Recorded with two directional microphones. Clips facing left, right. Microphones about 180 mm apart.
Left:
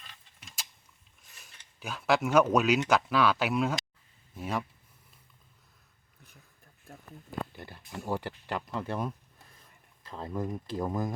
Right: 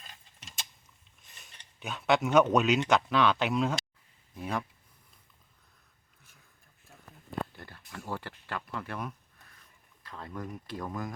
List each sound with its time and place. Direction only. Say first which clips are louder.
1.2 s speech: right 1 dB; centre (ahead or behind)
7.5 s speech: left 4 dB; 20° left (ahead or behind)